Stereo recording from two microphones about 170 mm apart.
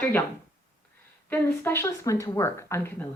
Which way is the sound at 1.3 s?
15° left (ahead or behind).